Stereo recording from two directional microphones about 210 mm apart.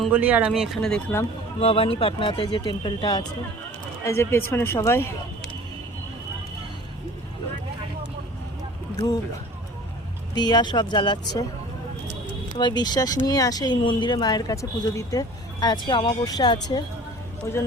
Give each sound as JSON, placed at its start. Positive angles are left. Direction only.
{"t": 0.0, "sound": "speech", "side_deg": -5}
{"t": 1.5, "sound": "speech", "side_deg": 25}
{"t": 10.3, "sound": "speech", "side_deg": 20}
{"t": 12.5, "sound": "speech", "side_deg": 20}